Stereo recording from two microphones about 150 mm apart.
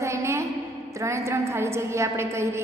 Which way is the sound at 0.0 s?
20° right (ahead or behind).